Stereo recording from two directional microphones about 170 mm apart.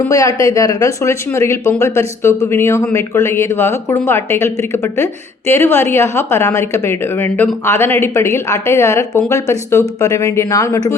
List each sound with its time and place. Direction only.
0.1 s a woman's voice: 20° left (ahead or behind)